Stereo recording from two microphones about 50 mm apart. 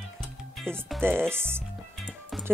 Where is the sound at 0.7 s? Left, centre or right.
Right.